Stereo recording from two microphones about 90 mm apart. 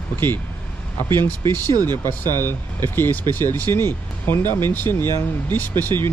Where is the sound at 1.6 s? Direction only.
45° right (ahead or behind).